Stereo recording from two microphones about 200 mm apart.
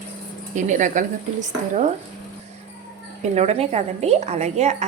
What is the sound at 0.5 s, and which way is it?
A woman's voice, 40° right (ahead or behind).